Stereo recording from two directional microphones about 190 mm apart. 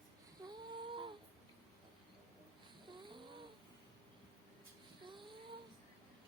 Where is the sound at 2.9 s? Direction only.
25° right (ahead or behind).